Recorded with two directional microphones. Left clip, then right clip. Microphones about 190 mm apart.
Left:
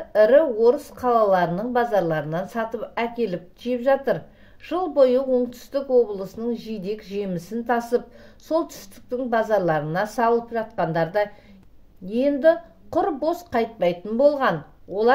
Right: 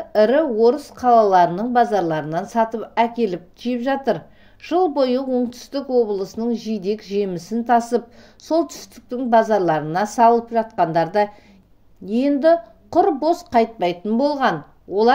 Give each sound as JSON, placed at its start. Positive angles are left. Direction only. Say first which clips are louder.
{"t": 0.1, "sound": "speech", "louder": "even", "side_deg": -40}